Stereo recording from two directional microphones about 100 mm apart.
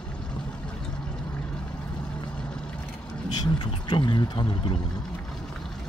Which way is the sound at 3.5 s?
50° left (ahead or behind).